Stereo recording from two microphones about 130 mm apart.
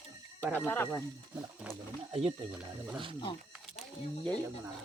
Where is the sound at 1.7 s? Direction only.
10° right (ahead or behind).